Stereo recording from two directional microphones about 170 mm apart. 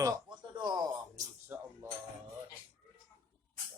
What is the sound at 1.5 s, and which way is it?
Dishes, 15° right (ahead or behind).